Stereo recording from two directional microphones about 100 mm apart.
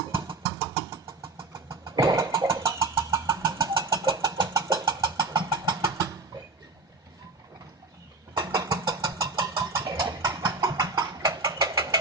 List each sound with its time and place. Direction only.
0.3 s vehicle: 30° right (ahead or behind)
4.1 s vehicle: 45° right (ahead or behind); by 5.1 s 30° right (ahead or behind)
5.3 s vehicle: 45° right (ahead or behind)
8.5 s vehicle: 40° right (ahead or behind)